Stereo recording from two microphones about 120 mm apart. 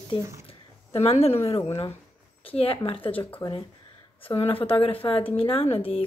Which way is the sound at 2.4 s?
50° left (ahead or behind).